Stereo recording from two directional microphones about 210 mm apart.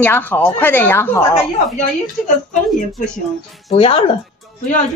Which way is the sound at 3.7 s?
25° left (ahead or behind).